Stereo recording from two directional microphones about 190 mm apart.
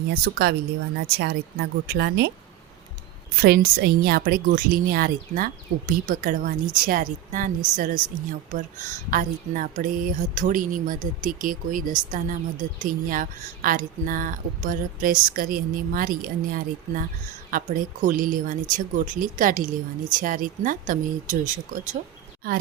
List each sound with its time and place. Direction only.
0.1 s speech: 55° right (ahead or behind)
3.4 s speech: 55° right (ahead or behind)
9.0 s speech: 45° right (ahead or behind)